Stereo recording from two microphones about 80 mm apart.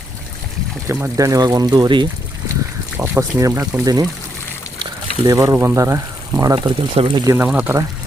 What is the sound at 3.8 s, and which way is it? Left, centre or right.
Speech, right.